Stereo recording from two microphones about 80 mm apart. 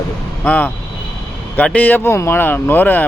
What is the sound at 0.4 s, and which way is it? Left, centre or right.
Speech, left.